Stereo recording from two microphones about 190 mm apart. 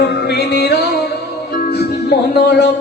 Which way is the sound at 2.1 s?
60° left (ahead or behind).